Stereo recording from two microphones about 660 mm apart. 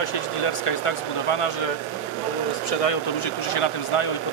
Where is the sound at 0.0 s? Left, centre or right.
Left.